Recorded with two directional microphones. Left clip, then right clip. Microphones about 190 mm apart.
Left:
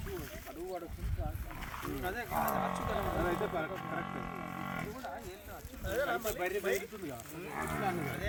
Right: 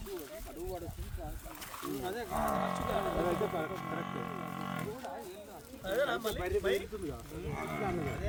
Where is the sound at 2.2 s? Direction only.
65° right (ahead or behind).